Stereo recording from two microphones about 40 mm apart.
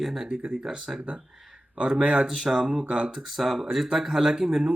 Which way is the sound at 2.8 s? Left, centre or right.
Right.